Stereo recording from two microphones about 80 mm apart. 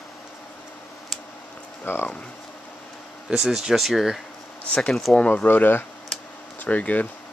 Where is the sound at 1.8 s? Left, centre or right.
Left.